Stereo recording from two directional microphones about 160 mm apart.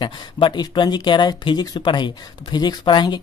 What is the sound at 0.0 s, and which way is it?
Speech, 30° left (ahead or behind).